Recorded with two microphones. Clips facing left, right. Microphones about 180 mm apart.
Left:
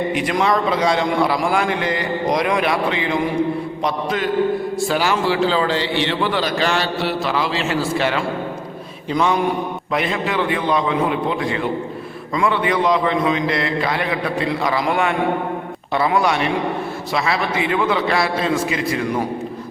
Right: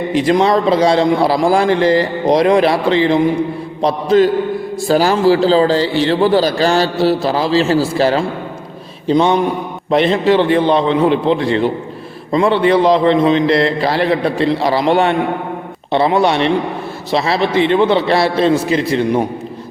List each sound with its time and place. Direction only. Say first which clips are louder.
0.1 s a man's voice: right 6 dB; 30° right (ahead or behind)